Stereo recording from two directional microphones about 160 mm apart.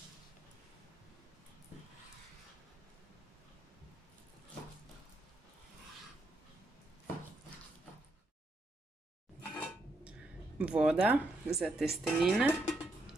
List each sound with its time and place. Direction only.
10.6 s speech: 5° right (ahead or behind)